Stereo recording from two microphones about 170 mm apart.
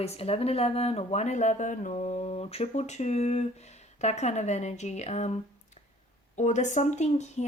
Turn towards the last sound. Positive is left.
turn(degrees=40)  # may be behind; listen again after turning